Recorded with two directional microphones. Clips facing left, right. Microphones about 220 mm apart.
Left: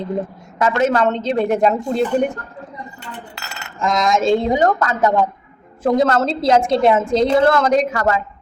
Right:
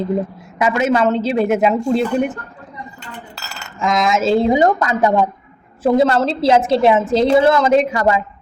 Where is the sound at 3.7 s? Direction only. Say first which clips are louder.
Right 1 dB; centre (ahead or behind).